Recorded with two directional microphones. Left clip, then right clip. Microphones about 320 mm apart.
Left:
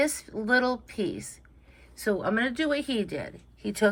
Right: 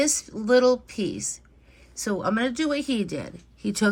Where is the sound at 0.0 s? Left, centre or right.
Centre.